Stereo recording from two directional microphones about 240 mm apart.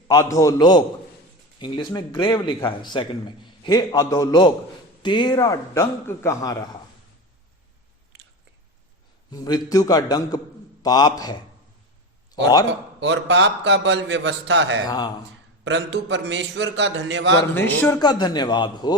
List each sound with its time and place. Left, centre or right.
0.1 s a man's voice: centre
9.3 s a man's voice: centre
13.0 s a man's voice: right
14.8 s a man's voice: centre
15.6 s a man's voice: right
17.5 s a man's voice: centre